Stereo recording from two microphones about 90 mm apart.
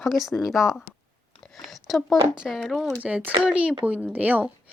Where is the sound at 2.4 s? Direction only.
Centre (ahead or behind).